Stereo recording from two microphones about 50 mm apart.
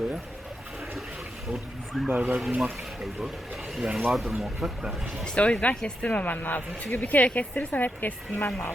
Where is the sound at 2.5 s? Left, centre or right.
Centre.